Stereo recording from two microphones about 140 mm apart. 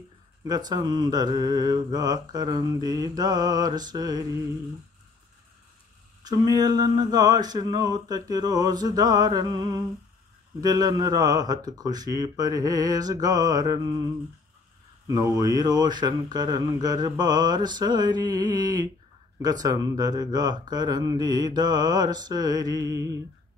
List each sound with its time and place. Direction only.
0.5 s speech: 30° right (ahead or behind)
6.2 s speech: 25° right (ahead or behind)
15.0 s speech: 25° right (ahead or behind)